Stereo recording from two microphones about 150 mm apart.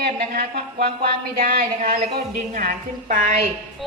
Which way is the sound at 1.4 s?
70° right (ahead or behind).